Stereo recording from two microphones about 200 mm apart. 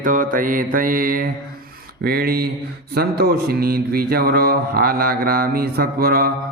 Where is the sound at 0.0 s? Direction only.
40° right (ahead or behind).